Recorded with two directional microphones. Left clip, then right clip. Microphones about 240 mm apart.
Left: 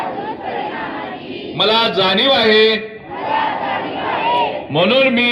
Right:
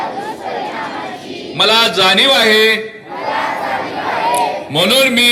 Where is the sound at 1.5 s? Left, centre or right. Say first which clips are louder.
Right 3 dB; right.